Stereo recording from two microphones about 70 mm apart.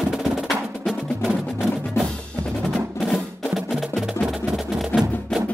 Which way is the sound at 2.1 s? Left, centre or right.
Centre.